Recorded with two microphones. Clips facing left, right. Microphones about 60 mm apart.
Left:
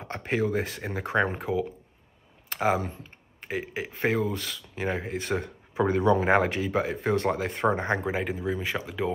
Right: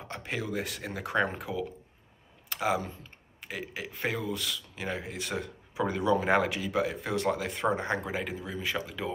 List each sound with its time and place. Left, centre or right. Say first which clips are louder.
0.0 s speech: left 8 dB; left
2.5 s speech: left 4 dB; left
8.0 s speech: left 5 dB; centre